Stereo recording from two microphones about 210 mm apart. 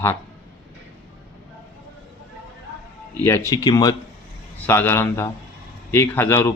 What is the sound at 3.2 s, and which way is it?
Speech, 10° left (ahead or behind).